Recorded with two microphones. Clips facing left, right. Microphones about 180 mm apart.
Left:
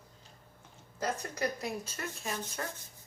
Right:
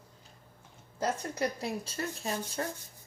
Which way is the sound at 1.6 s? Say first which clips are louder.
Right 3 dB; 30° right (ahead or behind).